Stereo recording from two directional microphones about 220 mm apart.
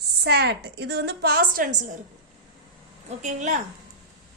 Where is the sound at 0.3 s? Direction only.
50° right (ahead or behind).